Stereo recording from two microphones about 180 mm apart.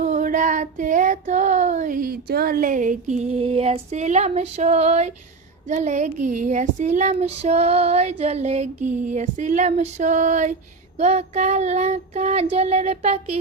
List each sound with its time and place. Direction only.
0.0 s child singing: 45° right (ahead or behind)